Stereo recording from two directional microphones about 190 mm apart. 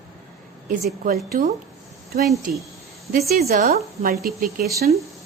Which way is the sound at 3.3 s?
55° right (ahead or behind).